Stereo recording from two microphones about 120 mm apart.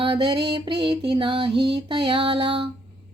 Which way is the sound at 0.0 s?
40° right (ahead or behind).